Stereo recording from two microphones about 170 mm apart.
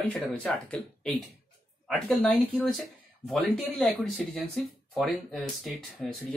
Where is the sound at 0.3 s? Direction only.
5° left (ahead or behind).